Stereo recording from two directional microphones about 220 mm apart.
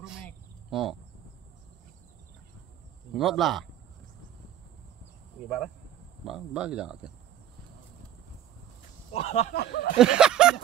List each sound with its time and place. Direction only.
0.7 s speech: centre (ahead or behind)
3.2 s speech: centre (ahead or behind)
6.2 s speech: 5° right (ahead or behind)
9.1 s speech: 30° left (ahead or behind)
9.5 s speech: 45° left (ahead or behind)
9.9 s speech: 5° right (ahead or behind)